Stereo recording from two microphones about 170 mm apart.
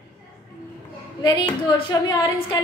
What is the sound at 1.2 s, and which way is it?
Speech, 25° left (ahead or behind).